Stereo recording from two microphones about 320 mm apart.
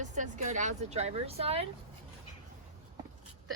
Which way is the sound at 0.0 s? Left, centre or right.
Right.